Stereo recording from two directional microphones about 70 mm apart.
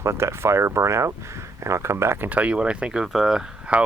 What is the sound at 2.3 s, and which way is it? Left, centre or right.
Speech, right.